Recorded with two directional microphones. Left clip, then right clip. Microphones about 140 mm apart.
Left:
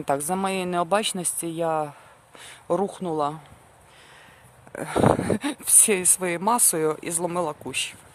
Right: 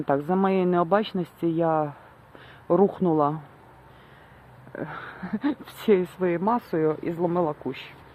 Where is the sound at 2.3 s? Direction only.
40° left (ahead or behind).